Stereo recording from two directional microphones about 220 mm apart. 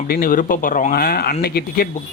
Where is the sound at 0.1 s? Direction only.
40° left (ahead or behind).